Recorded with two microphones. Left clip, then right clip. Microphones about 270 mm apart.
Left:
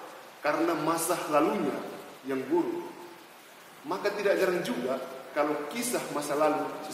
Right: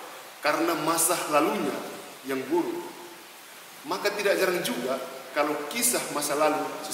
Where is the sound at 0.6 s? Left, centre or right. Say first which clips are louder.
Right 2 dB; centre.